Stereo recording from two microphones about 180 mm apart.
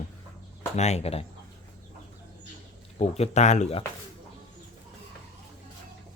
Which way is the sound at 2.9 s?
35° left (ahead or behind).